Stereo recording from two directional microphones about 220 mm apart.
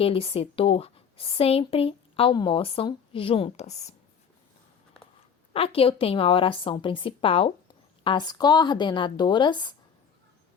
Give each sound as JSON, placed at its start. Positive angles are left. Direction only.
{"t": 0.0, "sound": "speech", "side_deg": 25}
{"t": 5.5, "sound": "speech", "side_deg": 25}